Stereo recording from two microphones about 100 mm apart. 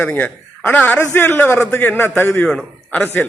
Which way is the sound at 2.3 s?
5° left (ahead or behind).